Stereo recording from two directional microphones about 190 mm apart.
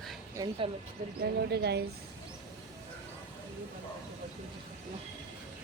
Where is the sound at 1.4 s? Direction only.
60° right (ahead or behind).